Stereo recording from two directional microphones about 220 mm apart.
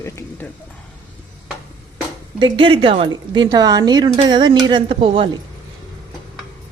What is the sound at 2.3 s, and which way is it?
Speech, 20° right (ahead or behind).